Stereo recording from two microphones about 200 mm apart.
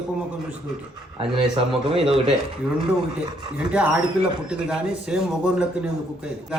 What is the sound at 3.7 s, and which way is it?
Speech, 5° right (ahead or behind).